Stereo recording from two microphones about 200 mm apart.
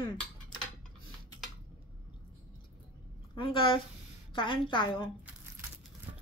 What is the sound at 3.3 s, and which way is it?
A woman's voice, 25° left (ahead or behind).